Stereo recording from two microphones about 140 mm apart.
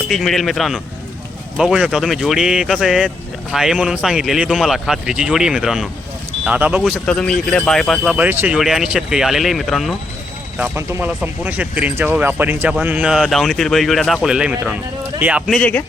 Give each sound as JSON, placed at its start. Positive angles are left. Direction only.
{"t": 0.1, "sound": "speech", "side_deg": 0}
{"t": 8.1, "sound": "speech", "side_deg": -10}
{"t": 8.5, "sound": "speech", "side_deg": 0}
{"t": 10.6, "sound": "speech", "side_deg": -15}
{"t": 15.5, "sound": "speech", "side_deg": 10}